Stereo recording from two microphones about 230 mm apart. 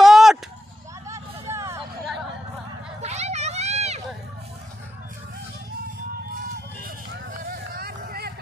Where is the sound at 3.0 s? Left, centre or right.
Right.